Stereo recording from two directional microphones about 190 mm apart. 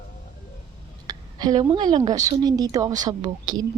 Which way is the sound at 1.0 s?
20° right (ahead or behind).